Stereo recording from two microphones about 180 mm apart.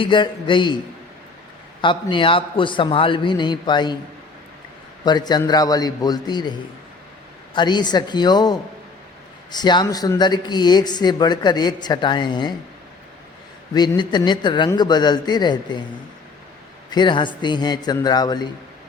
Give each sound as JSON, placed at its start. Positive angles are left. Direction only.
{"t": 0.0, "sound": "speech", "side_deg": 25}
{"t": 1.8, "sound": "speech", "side_deg": 25}
{"t": 5.0, "sound": "speech", "side_deg": 25}
{"t": 7.5, "sound": "speech", "side_deg": 25}
{"t": 13.7, "sound": "speech", "side_deg": 25}
{"t": 16.9, "sound": "speech", "side_deg": 25}